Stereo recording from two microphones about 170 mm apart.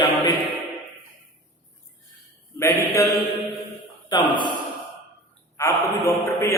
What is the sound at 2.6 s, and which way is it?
Mantra, 15° left (ahead or behind).